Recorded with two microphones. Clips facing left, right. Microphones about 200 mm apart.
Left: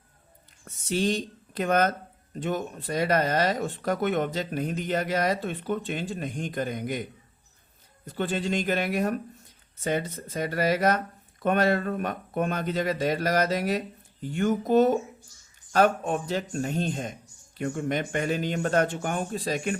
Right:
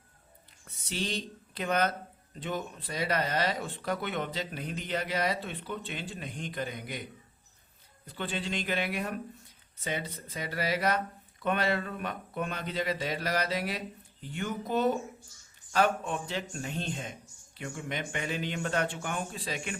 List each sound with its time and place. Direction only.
0.6 s speech: 45° left (ahead or behind)
8.0 s speech: 45° left (ahead or behind)